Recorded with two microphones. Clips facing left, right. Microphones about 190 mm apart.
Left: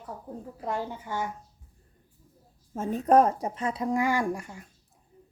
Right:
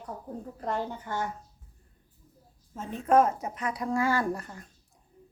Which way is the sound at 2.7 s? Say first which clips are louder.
Left 3 dB; 45° left (ahead or behind).